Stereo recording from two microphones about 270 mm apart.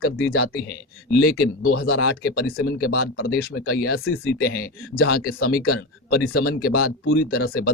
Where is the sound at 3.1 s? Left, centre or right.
Left.